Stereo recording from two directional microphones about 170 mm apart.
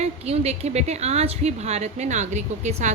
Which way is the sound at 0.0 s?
40° right (ahead or behind).